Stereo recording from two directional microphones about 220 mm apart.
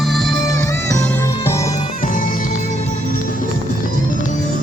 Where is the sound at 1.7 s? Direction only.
35° left (ahead or behind).